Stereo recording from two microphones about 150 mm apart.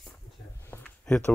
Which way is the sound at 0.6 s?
15° left (ahead or behind).